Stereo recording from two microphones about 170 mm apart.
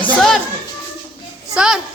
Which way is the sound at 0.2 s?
Centre (ahead or behind).